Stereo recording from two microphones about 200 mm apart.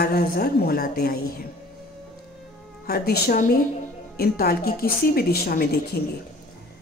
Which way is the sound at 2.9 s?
45° left (ahead or behind).